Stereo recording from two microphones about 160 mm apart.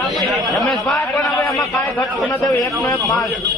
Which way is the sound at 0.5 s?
Centre (ahead or behind).